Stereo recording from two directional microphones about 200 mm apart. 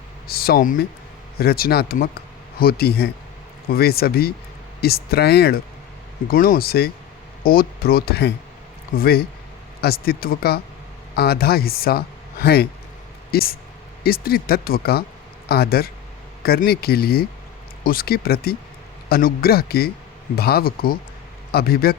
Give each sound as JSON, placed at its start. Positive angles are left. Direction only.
{"t": 0.3, "sound": "speech", "side_deg": 50}